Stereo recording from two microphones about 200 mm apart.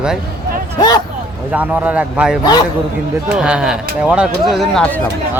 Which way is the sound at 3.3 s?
5° right (ahead or behind).